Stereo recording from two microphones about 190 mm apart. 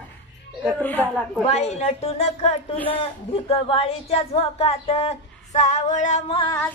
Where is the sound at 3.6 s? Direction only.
30° left (ahead or behind).